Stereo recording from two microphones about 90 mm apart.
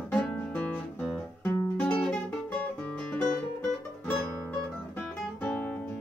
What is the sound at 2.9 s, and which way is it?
Music, 10° left (ahead or behind).